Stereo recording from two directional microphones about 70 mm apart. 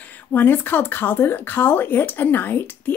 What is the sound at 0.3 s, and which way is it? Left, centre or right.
Speech, left.